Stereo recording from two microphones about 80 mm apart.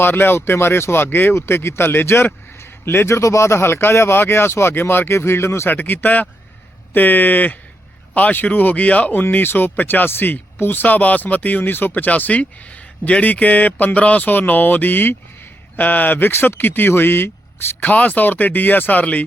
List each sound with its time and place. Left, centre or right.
0.0 s speech: left